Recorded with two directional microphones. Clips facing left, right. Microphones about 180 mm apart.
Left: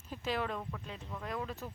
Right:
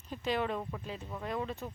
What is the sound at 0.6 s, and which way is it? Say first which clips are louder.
Speech: right 3 dB; 20° right (ahead or behind).